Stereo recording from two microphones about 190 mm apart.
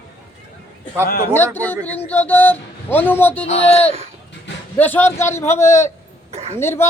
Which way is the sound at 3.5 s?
35° left (ahead or behind).